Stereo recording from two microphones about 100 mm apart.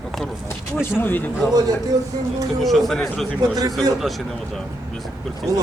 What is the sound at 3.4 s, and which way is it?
Speech, 35° right (ahead or behind).